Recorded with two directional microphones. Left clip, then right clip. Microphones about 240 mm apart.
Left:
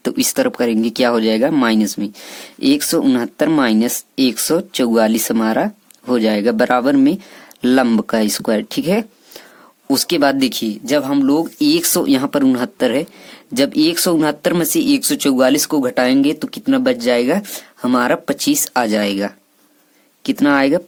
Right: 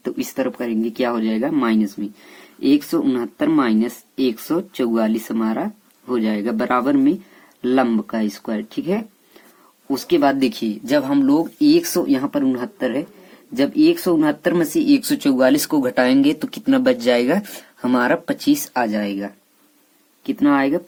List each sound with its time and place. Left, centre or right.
0.0 s speech: left